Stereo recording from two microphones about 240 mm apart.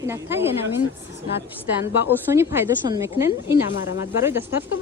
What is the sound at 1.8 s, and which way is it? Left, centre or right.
Speech, centre.